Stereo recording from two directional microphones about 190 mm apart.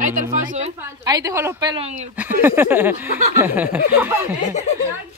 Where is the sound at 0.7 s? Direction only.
20° right (ahead or behind).